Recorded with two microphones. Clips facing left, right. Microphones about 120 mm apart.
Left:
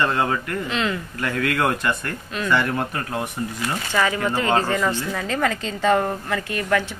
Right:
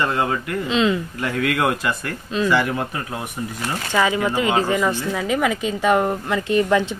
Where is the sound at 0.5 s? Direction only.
20° right (ahead or behind).